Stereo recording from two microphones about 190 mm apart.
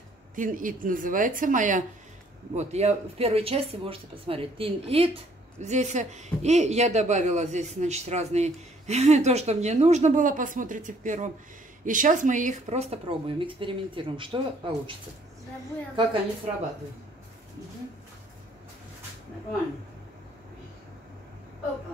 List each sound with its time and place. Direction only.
0.4 s a woman's voice: 45° right (ahead or behind); by 15.0 s 25° right (ahead or behind)